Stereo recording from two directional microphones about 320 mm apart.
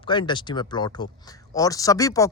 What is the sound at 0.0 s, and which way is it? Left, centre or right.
Speech, centre.